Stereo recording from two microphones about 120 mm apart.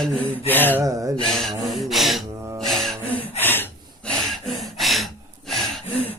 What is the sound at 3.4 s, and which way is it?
Gasp, 15° left (ahead or behind).